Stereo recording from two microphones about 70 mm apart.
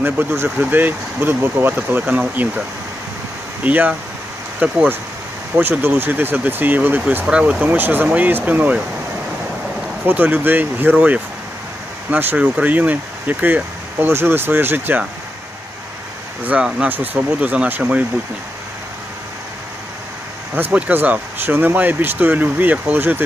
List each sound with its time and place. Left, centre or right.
0.0 s speech: right
3.6 s speech: right
7.3 s speech: centre
7.6 s speech: right
10.1 s speech: right
16.4 s speech: right
16.6 s speech: centre
16.9 s speech: right
20.6 s speech: centre